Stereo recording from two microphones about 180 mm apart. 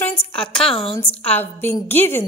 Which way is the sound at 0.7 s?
30° left (ahead or behind).